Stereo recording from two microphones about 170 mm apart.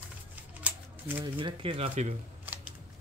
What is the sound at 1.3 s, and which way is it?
Speech, 30° right (ahead or behind).